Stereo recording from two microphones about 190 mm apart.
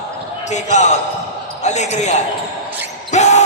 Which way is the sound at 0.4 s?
40° left (ahead or behind).